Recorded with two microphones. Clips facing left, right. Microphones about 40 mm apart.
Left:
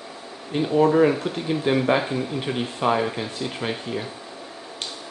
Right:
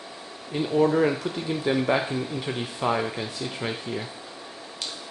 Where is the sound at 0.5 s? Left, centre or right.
Left.